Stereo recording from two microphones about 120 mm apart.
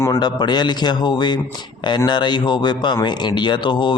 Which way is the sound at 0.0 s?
30° left (ahead or behind).